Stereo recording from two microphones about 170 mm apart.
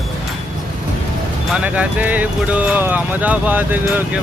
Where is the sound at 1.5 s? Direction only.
5° right (ahead or behind).